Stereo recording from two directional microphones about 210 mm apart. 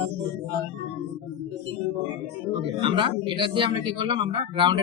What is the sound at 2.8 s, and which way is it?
Speech, 25° right (ahead or behind).